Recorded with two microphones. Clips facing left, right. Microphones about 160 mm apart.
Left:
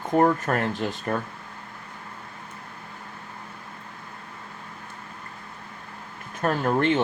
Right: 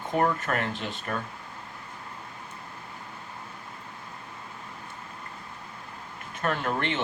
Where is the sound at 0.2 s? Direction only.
40° left (ahead or behind).